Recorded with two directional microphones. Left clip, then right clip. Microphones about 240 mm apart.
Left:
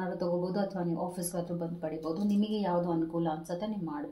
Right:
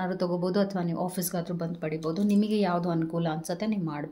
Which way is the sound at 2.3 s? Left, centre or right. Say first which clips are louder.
Right 3 dB; right.